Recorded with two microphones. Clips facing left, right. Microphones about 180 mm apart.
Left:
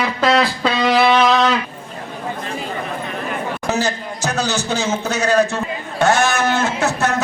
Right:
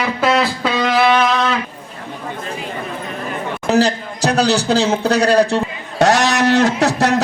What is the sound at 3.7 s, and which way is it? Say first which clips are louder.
A man's voice: right 6 dB; 35° right (ahead or behind).